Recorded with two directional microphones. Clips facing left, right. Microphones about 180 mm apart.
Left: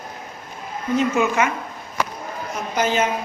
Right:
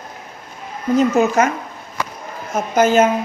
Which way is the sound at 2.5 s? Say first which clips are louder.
Right 8 dB; 45° right (ahead or behind).